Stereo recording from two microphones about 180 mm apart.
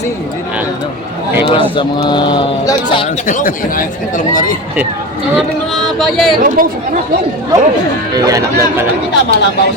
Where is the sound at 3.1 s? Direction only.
45° left (ahead or behind).